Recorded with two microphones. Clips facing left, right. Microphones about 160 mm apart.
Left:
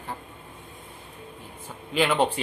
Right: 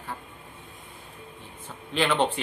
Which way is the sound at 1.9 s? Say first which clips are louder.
Left 2 dB; 10° left (ahead or behind).